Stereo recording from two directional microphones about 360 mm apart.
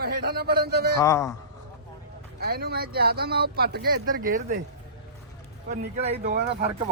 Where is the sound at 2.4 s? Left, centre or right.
Right.